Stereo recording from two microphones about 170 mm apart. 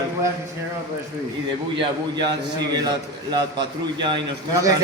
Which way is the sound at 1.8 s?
25° right (ahead or behind).